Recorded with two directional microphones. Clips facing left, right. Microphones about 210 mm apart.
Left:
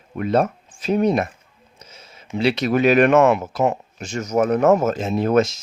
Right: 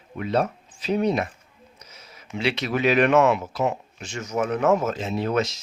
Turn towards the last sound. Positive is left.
turn(degrees=50)  # may be behind; listen again after turning